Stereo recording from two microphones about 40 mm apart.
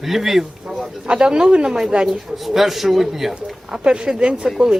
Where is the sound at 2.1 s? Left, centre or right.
Centre.